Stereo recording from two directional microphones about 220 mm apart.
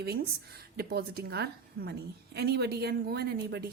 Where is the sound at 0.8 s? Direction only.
45° right (ahead or behind).